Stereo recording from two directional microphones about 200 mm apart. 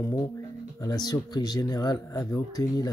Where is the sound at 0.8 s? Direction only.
20° left (ahead or behind).